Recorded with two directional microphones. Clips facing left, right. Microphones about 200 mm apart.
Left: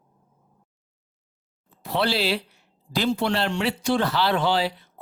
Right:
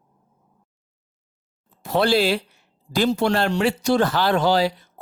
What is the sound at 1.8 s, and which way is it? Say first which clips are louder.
Speech: right 5 dB; 45° right (ahead or behind).